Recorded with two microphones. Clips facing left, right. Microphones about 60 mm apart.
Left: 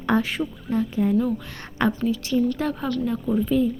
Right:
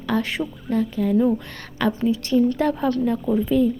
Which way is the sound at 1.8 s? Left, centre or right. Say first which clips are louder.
Even; left.